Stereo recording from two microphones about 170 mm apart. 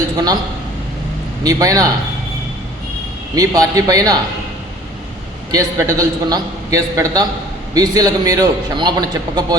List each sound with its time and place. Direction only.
1.5 s a man's voice: 20° right (ahead or behind)
3.3 s a man's voice: 20° right (ahead or behind)
5.5 s a man's voice: 20° right (ahead or behind)